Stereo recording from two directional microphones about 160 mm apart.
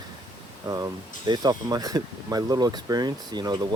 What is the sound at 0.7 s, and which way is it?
Speech, 25° right (ahead or behind).